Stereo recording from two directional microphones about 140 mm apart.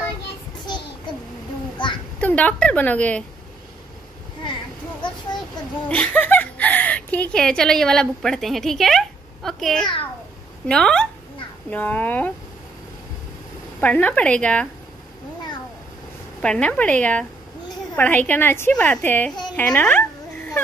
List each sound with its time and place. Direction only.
1.8 s a sound: 35° left (ahead or behind)
2.1 s a woman's voice: 10° left (ahead or behind)
5.9 s a woman's voice: 10° left (ahead or behind)
13.7 s a woman's voice: 10° left (ahead or behind)
16.3 s a woman's voice: 5° left (ahead or behind)
19.5 s a sound: 10° left (ahead or behind)